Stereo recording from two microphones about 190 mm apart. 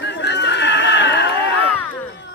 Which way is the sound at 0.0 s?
65° left (ahead or behind).